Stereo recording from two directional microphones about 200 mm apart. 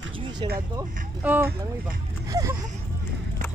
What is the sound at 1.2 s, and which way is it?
Speech, 10° right (ahead or behind).